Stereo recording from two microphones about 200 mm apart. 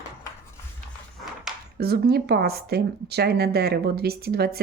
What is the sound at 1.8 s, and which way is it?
Speech, 50° right (ahead or behind).